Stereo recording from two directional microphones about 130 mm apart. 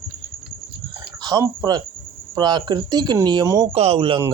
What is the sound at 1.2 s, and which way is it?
Speech, 25° right (ahead or behind).